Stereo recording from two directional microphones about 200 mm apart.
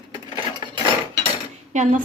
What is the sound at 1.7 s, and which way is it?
Speech, 40° right (ahead or behind).